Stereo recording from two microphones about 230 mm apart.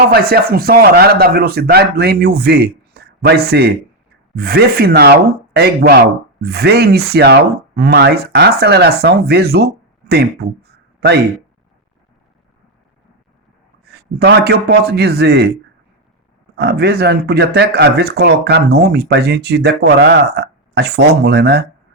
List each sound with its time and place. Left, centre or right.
0.1 s speech: right
14.2 s speech: right
16.6 s speech: right